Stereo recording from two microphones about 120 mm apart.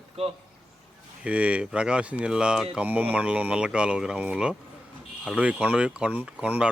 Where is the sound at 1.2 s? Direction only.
10° right (ahead or behind).